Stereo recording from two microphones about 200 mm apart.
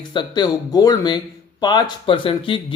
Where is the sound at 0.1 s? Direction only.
20° left (ahead or behind).